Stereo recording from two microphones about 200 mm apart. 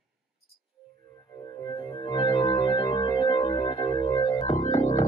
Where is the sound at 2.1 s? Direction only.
25° left (ahead or behind).